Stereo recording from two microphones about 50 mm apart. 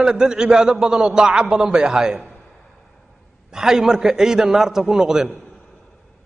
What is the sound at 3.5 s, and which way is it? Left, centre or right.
A man's voice, centre.